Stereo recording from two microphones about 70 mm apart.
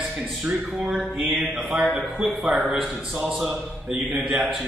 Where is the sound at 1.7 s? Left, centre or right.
Right.